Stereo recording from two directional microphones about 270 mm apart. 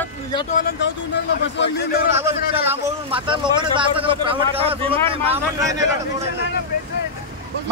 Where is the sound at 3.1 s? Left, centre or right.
Centre.